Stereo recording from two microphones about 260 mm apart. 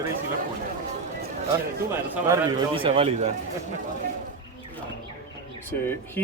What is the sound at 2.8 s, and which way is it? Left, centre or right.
Speech, right.